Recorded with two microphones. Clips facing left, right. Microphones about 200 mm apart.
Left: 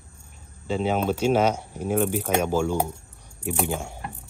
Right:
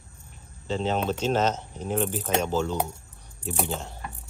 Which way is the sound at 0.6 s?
10° left (ahead or behind).